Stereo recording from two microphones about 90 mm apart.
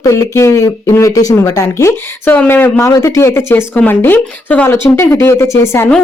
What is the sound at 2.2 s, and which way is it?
Speech, 20° left (ahead or behind).